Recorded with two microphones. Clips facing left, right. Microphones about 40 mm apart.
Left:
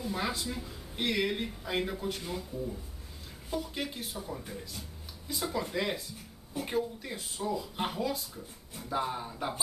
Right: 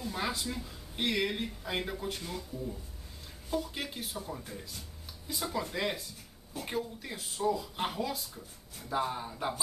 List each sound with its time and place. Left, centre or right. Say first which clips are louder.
0.0 s speech: left 1 dB; centre